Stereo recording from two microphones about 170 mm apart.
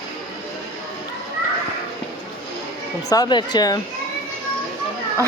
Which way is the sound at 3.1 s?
25° left (ahead or behind).